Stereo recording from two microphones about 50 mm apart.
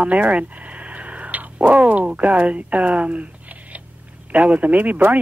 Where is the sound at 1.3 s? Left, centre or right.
Right.